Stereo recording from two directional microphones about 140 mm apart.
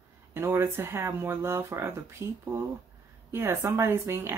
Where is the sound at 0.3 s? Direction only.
15° right (ahead or behind).